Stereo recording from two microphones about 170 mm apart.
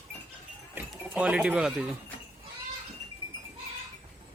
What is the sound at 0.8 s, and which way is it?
Speech, 10° right (ahead or behind).